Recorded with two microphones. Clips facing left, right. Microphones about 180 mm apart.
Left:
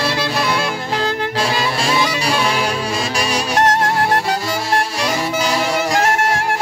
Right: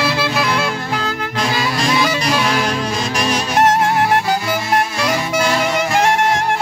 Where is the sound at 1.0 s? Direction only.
30° left (ahead or behind).